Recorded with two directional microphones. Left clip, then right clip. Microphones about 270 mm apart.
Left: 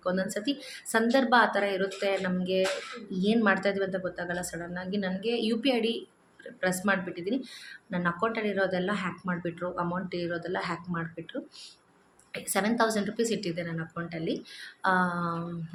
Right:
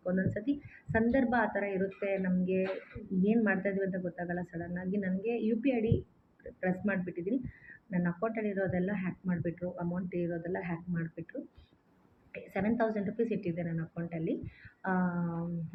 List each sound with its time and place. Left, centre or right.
0.0 s speech: centre
12.3 s speech: centre
14.8 s a sound: centre